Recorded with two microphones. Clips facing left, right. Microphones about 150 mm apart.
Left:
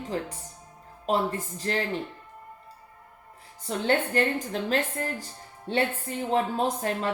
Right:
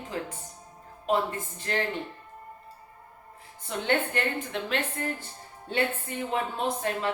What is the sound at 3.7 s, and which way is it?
A woman's voice, 35° left (ahead or behind).